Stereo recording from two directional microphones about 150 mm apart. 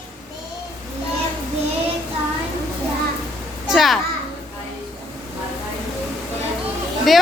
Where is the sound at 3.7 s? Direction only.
Centre (ahead or behind).